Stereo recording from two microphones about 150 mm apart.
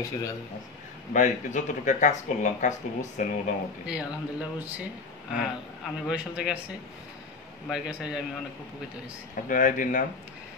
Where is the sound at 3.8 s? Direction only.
5° right (ahead or behind).